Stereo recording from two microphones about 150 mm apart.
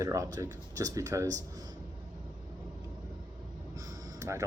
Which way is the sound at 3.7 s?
20° right (ahead or behind).